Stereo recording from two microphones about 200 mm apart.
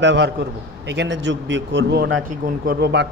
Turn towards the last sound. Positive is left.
turn(degrees=-55)  # may be behind; listen again after turning